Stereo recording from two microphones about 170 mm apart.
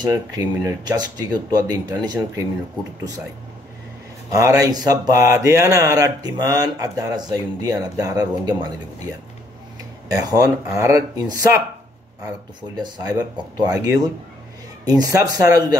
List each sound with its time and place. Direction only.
0.0 s speech: 20° right (ahead or behind)
4.3 s speech: 20° right (ahead or behind)
12.7 s speech: 25° right (ahead or behind)